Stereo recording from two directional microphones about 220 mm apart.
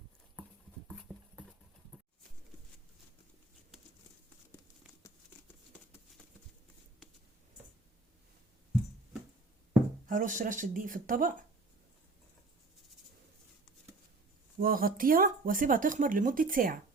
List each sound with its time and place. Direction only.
0.9 s dog: centre (ahead or behind)
10.1 s speech: 35° right (ahead or behind)
14.6 s speech: 40° right (ahead or behind)